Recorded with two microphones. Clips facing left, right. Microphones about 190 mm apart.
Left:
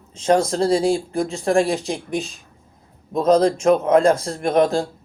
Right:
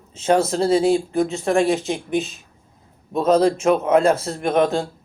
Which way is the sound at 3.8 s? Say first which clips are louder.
Even; 30° left (ahead or behind).